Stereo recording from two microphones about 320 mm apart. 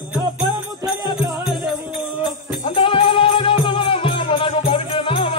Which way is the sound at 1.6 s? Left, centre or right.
Centre.